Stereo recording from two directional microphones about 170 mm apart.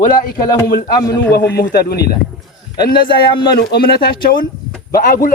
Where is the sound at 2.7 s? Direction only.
25° left (ahead or behind).